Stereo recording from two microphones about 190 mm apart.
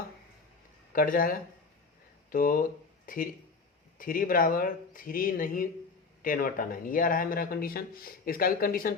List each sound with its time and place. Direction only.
0.9 s speech: 45° left (ahead or behind)